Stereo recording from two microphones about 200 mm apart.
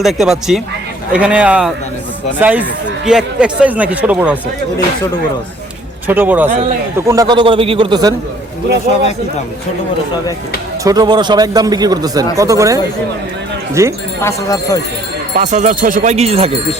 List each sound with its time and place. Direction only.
0.0 s a man's voice: centre (ahead or behind)
6.1 s a man's voice: 10° right (ahead or behind)
7.1 s a man's voice: 20° right (ahead or behind)
10.8 s a man's voice: 20° right (ahead or behind)
14.2 s speech: 15° left (ahead or behind)
15.4 s speech: 35° right (ahead or behind)